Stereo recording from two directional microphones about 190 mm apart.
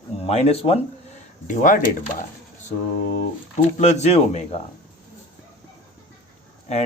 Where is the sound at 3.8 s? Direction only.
35° left (ahead or behind).